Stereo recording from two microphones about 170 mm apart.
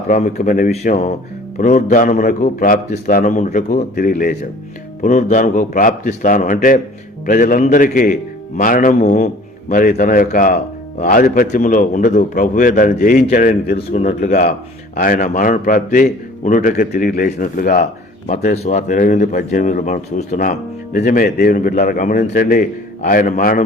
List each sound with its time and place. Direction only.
0.1 s speech: 45° left (ahead or behind)
3.9 s speech: 60° left (ahead or behind)
13.7 s speech: 45° left (ahead or behind)
14.3 s speech: 65° left (ahead or behind)
18.3 s speech: 40° left (ahead or behind)
20.5 s speech: 60° left (ahead or behind)
21.5 s speech: 50° left (ahead or behind)